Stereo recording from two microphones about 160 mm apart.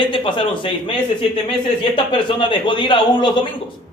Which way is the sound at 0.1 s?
30° left (ahead or behind).